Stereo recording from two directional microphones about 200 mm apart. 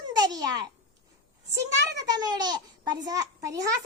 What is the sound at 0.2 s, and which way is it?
A child's voice, 20° right (ahead or behind).